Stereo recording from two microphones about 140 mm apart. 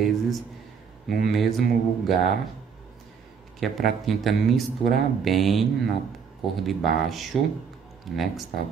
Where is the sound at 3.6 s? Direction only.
Centre (ahead or behind).